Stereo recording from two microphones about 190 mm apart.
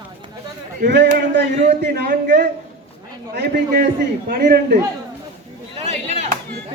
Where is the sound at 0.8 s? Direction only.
60° right (ahead or behind).